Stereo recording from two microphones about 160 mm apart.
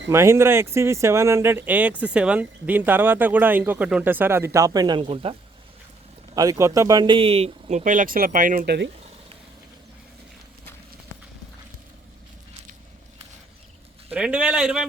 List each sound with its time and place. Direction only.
0.1 s speech: 15° right (ahead or behind); by 5.4 s 35° right (ahead or behind)
6.3 s a man's voice: 20° right (ahead or behind); by 8.9 s 90° right
14.1 s speech: 5° right (ahead or behind)